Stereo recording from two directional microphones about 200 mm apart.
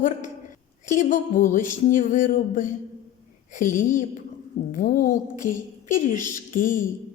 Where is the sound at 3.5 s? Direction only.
40° left (ahead or behind).